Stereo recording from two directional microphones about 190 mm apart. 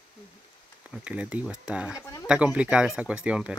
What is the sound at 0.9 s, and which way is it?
Speech, 5° right (ahead or behind).